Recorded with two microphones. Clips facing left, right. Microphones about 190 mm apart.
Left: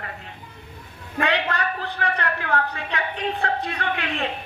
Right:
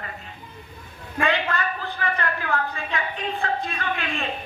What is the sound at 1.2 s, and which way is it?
A woman's voice, 70° left (ahead or behind).